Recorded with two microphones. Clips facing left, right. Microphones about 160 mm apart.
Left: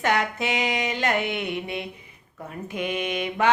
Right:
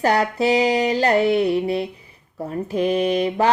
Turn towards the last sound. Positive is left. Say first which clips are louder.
# right 7 dB
turn(degrees=-35)  # may be behind; listen again after turning